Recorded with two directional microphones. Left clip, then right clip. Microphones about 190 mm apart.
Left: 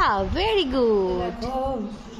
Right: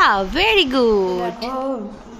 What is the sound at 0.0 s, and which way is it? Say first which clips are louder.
A woman's voice: right 6 dB; 5° right (ahead or behind).